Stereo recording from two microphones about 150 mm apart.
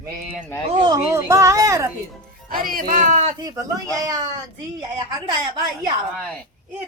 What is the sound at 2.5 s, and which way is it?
Speech, 70° right (ahead or behind).